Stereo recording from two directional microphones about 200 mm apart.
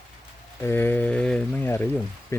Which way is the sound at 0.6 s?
10° left (ahead or behind).